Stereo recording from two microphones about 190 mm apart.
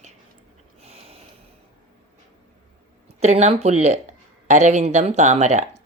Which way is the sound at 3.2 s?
35° right (ahead or behind).